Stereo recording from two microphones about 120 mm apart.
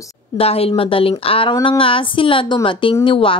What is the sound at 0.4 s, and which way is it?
Speech, 55° left (ahead or behind).